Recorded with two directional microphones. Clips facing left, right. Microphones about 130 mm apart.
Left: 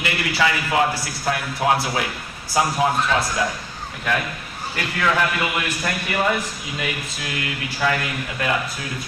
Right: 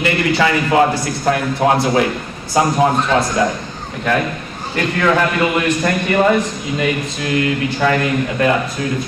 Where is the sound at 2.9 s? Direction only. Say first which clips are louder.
Right 5 dB; 25° right (ahead or behind).